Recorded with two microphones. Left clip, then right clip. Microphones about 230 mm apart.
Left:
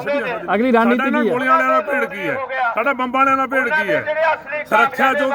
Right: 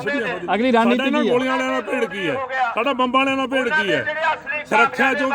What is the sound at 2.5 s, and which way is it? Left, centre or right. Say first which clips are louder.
Speech: left 2 dB; right.